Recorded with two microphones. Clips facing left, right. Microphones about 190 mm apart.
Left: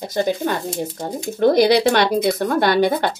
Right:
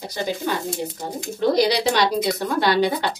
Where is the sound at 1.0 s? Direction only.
55° left (ahead or behind).